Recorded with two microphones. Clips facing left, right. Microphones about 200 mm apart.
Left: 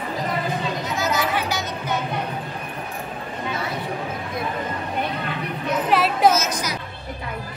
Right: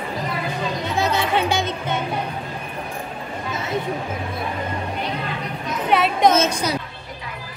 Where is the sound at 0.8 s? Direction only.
30° right (ahead or behind).